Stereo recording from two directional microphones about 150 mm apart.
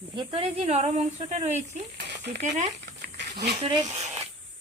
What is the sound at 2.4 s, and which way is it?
Speech, 50° right (ahead or behind).